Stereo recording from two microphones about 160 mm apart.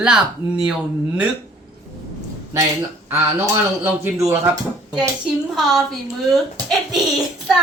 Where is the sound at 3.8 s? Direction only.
15° right (ahead or behind).